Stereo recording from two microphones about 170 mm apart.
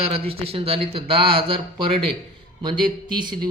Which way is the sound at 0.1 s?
35° right (ahead or behind).